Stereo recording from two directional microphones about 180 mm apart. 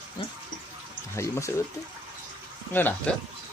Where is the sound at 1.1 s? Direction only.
15° left (ahead or behind).